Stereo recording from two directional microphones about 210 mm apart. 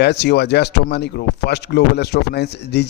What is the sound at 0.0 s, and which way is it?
Speech, 55° left (ahead or behind).